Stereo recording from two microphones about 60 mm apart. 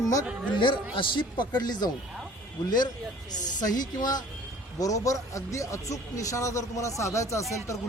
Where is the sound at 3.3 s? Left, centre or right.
Left.